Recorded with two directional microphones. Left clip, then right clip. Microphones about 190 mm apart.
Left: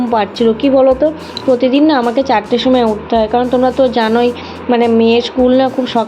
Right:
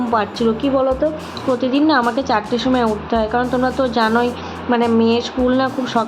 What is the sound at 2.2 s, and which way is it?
A woman's voice, 20° left (ahead or behind).